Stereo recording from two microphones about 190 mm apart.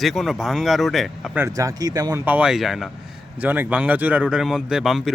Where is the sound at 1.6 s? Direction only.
20° right (ahead or behind).